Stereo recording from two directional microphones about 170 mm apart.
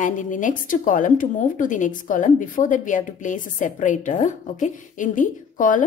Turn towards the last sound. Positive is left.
turn(degrees=50)  # may be behind; listen again after turning